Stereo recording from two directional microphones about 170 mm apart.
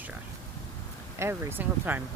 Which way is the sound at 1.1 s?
15° right (ahead or behind).